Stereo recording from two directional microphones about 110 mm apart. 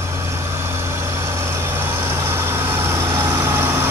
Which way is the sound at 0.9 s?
25° right (ahead or behind).